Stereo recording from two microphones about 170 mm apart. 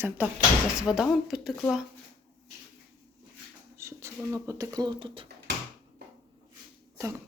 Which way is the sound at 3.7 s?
15° right (ahead or behind).